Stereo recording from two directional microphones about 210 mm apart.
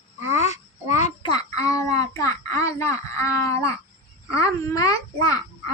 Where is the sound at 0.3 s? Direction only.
30° left (ahead or behind); by 3.7 s 15° left (ahead or behind).